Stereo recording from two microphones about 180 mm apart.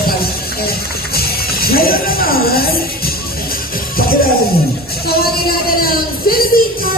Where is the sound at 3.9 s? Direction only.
55° left (ahead or behind).